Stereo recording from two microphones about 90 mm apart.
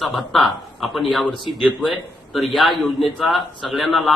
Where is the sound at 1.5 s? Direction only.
90° left.